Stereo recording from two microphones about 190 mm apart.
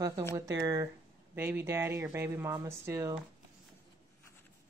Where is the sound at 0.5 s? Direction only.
15° right (ahead or behind).